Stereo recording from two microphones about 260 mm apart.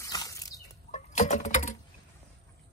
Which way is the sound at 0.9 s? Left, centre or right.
Left.